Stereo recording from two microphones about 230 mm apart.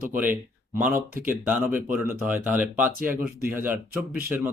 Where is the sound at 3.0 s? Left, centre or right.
Right.